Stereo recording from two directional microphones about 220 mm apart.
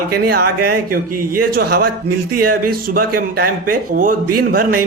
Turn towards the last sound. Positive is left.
turn(degrees=-40)  # may be behind; listen again after turning